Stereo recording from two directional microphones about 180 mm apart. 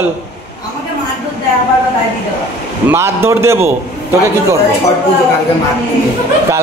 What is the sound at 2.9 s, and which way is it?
Speech, 15° right (ahead or behind).